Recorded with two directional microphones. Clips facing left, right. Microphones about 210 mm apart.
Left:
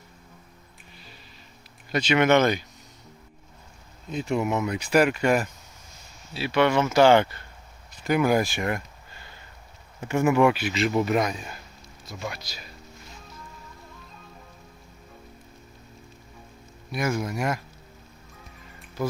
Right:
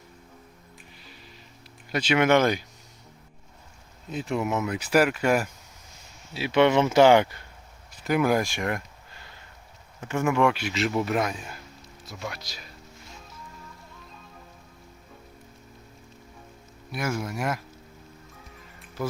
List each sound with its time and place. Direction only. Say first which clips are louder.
1.9 s speech: left 1 dB; 5° right (ahead or behind)
4.1 s speech: left 2 dB; centre (ahead or behind)
6.3 s speech: right 2 dB; 20° right (ahead or behind)
7.9 s a sound: left 1 dB; centre (ahead or behind)
10.0 s speech: left 3 dB; 10° left (ahead or behind)
16.9 s speech: left 3 dB; 5° right (ahead or behind)